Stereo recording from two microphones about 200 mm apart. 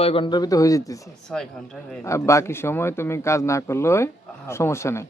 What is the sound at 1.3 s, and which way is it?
Speech, centre (ahead or behind).